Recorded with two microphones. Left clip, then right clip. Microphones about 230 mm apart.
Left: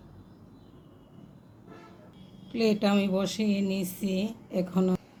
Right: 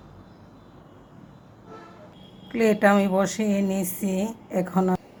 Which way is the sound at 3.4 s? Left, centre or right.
Right.